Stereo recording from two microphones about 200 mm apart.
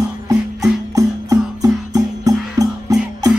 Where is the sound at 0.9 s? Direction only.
15° right (ahead or behind).